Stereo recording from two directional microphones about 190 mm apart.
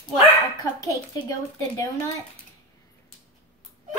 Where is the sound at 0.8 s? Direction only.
15° left (ahead or behind).